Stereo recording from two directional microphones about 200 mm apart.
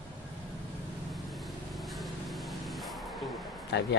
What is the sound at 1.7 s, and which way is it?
Vehicle, centre (ahead or behind).